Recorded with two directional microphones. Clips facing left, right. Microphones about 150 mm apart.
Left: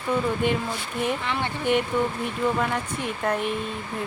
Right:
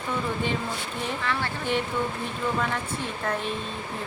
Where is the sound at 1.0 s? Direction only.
20° left (ahead or behind).